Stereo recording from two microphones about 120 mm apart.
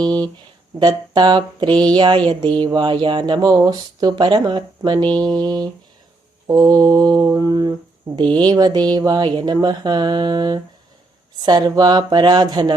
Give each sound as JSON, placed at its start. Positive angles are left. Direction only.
{"t": 0.0, "sound": "speech", "side_deg": -35}
{"t": 0.8, "sound": "mantra", "side_deg": -35}